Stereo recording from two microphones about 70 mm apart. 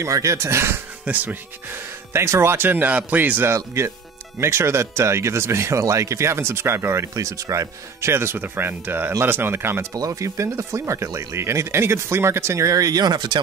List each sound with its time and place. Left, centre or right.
0.0 s speech: right
1.0 s speech: right
3.4 s speech: right
9.9 s speech: right